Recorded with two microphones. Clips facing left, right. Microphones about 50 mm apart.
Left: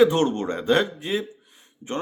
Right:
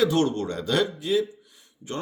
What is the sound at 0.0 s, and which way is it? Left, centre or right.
Speech, left.